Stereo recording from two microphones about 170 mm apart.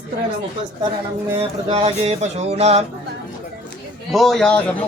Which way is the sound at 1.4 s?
40° right (ahead or behind).